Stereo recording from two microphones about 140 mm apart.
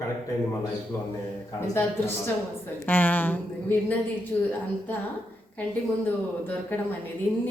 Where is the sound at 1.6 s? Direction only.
15° left (ahead or behind).